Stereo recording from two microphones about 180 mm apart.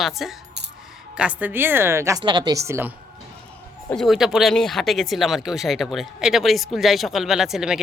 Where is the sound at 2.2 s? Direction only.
25° right (ahead or behind).